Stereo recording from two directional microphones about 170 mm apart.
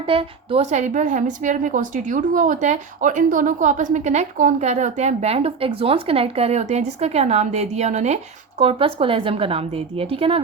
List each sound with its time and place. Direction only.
0.1 s a woman's voice: 35° right (ahead or behind)